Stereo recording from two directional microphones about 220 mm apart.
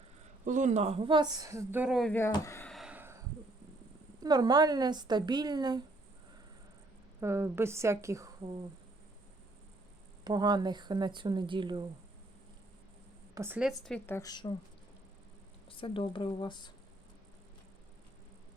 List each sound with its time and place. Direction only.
0.4 s speech: 35° right (ahead or behind); by 3.2 s 10° right (ahead or behind)
4.2 s speech: 20° right (ahead or behind)
7.2 s a woman's voice: 10° right (ahead or behind)
10.2 s speech: 20° right (ahead or behind)
13.3 s a woman's voice: 10° right (ahead or behind)
14.2 s speech: 20° left (ahead or behind)
15.7 s speech: 25° left (ahead or behind)